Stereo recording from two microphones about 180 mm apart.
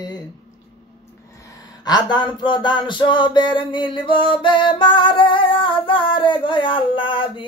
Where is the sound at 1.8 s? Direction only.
25° left (ahead or behind).